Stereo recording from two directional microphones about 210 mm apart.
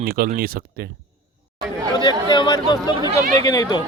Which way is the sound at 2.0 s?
20° left (ahead or behind).